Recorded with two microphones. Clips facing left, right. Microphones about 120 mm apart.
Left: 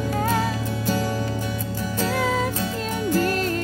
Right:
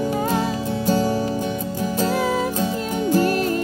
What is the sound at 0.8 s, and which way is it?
Music, 25° right (ahead or behind).